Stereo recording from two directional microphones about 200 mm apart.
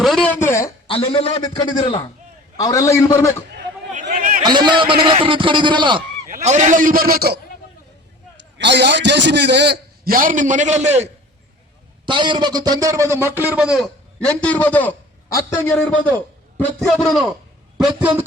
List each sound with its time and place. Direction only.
0.0 s a sound: centre (ahead or behind)
0.3 s a sound: 15° left (ahead or behind)
0.9 s a man's voice: 30° left (ahead or behind)
4.0 s chatter: 45° right (ahead or behind)
4.4 s a man's voice: 20° right (ahead or behind)
6.2 s speech: 40° right (ahead or behind)
8.5 s a man's voice: 60° right (ahead or behind); by 11.1 s 35° right (ahead or behind)
12.0 s a man's voice: 25° right (ahead or behind); by 13.8 s 5° right (ahead or behind)
14.3 s a man's voice: 5° left (ahead or behind)